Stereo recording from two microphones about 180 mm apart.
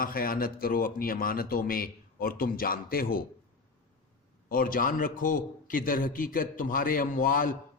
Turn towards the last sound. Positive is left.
turn(degrees=50)  # may be behind; listen again after turning